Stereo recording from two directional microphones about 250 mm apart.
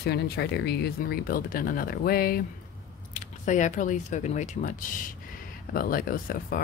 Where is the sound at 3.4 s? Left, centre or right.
Left.